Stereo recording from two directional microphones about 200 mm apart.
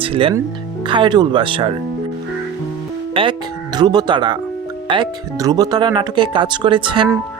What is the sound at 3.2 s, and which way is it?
Speech, 25° right (ahead or behind).